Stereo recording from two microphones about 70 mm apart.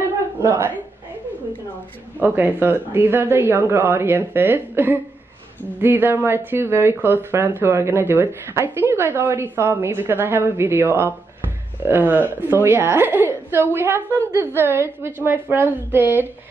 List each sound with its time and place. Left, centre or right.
0.5 s speech: right
2.1 s speech: right